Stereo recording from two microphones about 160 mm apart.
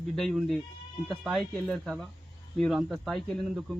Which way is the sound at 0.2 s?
Centre (ahead or behind).